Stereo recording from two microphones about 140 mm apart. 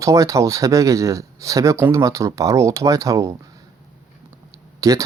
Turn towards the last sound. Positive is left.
turn(degrees=-25)  # may be behind; listen again after turning